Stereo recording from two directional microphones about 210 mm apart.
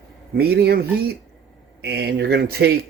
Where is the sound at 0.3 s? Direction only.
50° right (ahead or behind).